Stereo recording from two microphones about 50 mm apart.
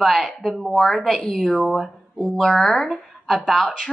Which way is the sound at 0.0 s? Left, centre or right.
Centre.